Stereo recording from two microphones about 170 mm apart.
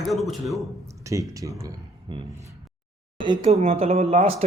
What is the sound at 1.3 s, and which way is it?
Speech, 20° right (ahead or behind).